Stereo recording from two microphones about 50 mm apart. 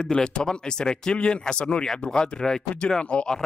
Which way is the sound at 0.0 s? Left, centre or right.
Centre.